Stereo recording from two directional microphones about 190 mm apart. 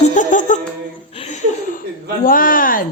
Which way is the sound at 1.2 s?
35° left (ahead or behind).